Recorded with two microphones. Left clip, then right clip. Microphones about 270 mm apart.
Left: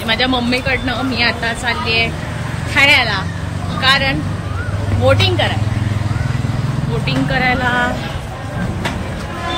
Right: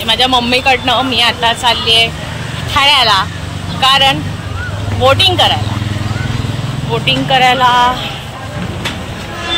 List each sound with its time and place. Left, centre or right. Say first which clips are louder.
0.0 s speech: right 5 dB; centre
7.1 s speech: right 7 dB; centre